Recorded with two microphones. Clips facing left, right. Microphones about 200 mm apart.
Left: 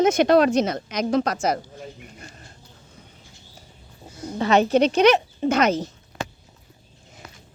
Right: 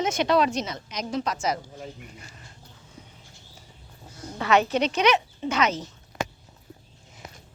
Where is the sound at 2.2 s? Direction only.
50° left (ahead or behind).